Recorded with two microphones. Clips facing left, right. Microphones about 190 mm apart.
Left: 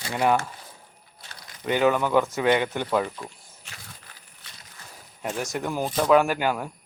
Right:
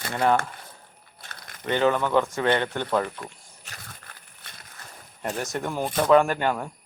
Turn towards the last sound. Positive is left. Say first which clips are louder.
# even
turn(degrees=5)  # may be behind; listen again after turning